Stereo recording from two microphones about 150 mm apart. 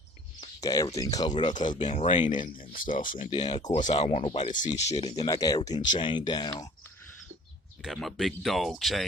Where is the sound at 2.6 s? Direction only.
65° left (ahead or behind).